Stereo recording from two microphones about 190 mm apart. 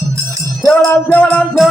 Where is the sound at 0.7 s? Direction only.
10° left (ahead or behind).